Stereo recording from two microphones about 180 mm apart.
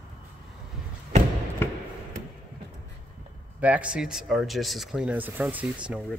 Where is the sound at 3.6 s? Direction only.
5° right (ahead or behind).